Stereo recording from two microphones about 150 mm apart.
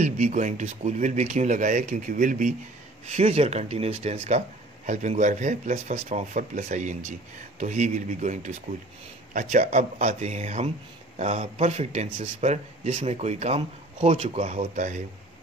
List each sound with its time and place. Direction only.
0.0 s speech: 55° right (ahead or behind)
3.1 s speech: 45° right (ahead or behind)